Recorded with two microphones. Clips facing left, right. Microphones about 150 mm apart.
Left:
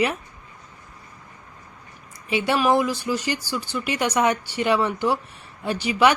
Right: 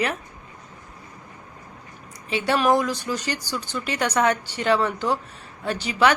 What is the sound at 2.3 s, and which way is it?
A woman's voice, 15° left (ahead or behind).